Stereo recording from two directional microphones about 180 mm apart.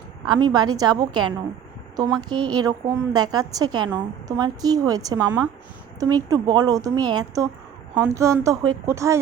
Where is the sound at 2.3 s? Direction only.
25° right (ahead or behind).